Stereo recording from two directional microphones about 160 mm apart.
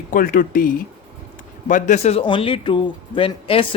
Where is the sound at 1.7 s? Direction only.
45° left (ahead or behind).